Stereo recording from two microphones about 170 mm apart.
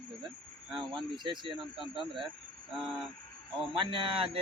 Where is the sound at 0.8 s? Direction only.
25° right (ahead or behind).